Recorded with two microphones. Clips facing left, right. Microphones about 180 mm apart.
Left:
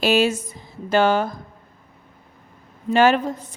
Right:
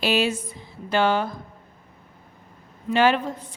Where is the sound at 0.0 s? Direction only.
45° left (ahead or behind).